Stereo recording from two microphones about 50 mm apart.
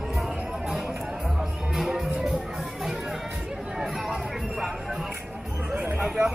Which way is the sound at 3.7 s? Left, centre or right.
Centre.